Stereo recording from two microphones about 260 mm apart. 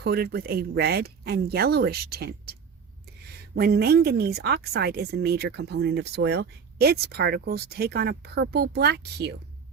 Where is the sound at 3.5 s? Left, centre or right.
Right.